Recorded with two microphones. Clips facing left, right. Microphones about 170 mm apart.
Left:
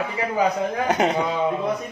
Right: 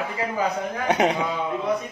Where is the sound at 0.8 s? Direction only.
Centre (ahead or behind).